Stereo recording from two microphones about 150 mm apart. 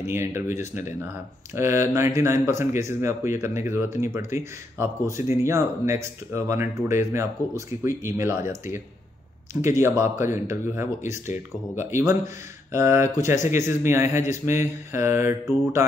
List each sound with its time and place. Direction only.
0.0 s speech: 15° right (ahead or behind)